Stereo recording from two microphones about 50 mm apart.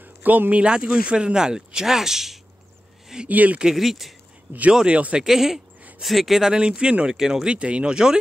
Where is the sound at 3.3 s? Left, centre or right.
Right.